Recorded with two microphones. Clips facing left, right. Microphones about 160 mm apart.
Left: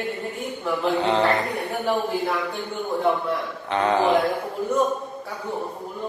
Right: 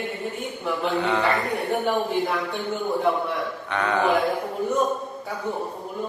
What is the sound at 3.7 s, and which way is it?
Speech, 25° left (ahead or behind).